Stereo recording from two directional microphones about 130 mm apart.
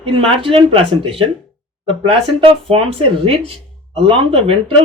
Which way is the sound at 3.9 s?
45° right (ahead or behind).